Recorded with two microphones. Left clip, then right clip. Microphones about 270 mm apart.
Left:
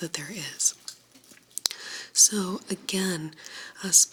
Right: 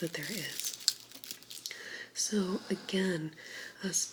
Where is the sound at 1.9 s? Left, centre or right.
Left.